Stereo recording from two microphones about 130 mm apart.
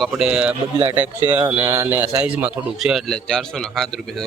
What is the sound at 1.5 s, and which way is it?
A man's voice, 20° right (ahead or behind).